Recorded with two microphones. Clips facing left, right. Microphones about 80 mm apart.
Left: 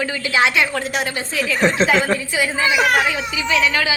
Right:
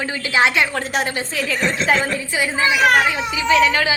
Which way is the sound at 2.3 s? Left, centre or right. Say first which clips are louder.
Even; right.